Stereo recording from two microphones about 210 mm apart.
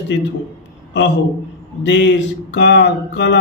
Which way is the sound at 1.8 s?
55° left (ahead or behind).